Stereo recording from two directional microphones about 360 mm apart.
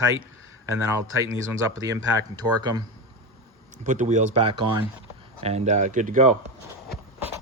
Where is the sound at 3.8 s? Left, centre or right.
Centre.